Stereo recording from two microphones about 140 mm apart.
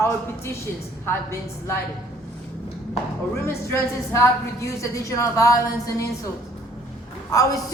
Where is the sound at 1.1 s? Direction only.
20° left (ahead or behind).